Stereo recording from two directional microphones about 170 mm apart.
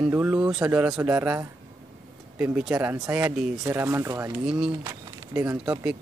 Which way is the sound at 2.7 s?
20° right (ahead or behind).